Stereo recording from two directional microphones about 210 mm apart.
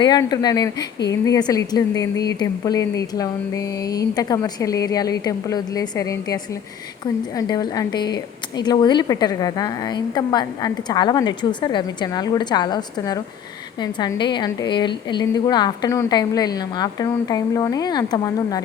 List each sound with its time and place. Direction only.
0.0 s a woman's voice: 20° left (ahead or behind)